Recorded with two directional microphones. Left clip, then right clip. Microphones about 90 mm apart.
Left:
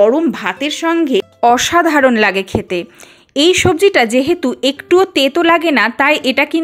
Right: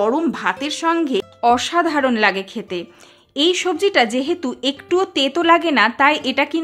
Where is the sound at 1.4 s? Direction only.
90° left.